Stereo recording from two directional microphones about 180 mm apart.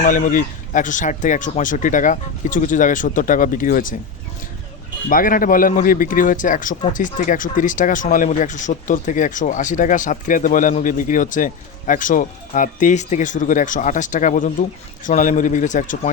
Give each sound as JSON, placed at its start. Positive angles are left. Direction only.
{"t": 0.0, "sound": "speech", "side_deg": 45}
{"t": 5.0, "sound": "speech", "side_deg": 50}